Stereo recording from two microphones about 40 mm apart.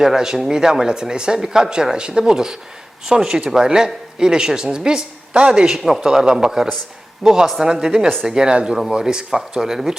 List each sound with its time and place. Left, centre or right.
0.0 s speech: centre
5.6 s speech: centre
9.6 s speech: centre